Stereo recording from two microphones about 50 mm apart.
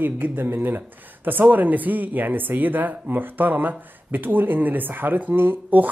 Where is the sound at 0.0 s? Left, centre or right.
Right.